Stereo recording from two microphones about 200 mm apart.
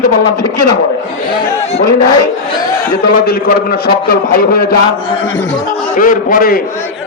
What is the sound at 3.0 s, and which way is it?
A man's voice, 50° left (ahead or behind).